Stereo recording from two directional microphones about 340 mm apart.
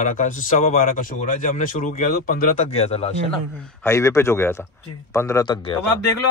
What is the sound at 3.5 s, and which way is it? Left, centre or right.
Speech, centre.